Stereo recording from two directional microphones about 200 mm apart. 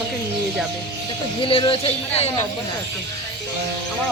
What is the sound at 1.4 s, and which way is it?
Speech, 25° left (ahead or behind).